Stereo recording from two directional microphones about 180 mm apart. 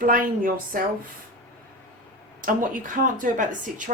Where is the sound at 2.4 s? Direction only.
50° right (ahead or behind).